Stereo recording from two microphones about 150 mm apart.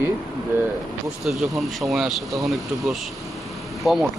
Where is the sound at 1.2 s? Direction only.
Centre (ahead or behind).